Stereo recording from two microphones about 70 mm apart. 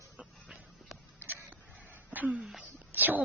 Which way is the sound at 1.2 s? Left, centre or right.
Right.